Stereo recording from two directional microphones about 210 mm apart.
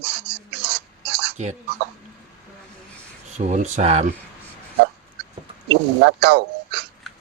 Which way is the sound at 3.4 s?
35° right (ahead or behind).